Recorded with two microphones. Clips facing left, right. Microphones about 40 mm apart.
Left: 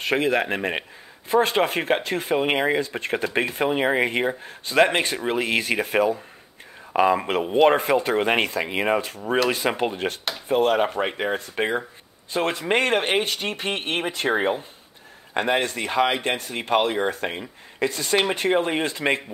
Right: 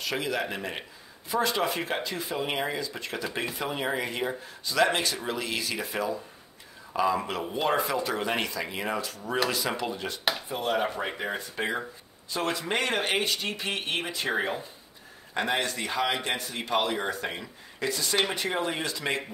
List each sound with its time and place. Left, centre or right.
0.0 s speech: left